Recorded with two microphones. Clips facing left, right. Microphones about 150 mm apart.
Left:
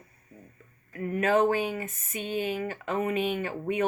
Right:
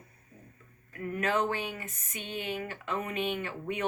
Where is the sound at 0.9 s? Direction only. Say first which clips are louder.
Left 6 dB; 25° left (ahead or behind).